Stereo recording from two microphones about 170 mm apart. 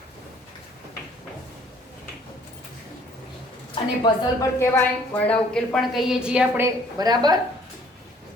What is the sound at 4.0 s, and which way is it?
Speech, 25° left (ahead or behind).